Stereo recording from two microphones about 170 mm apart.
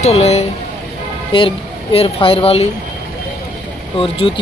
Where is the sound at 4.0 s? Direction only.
30° left (ahead or behind).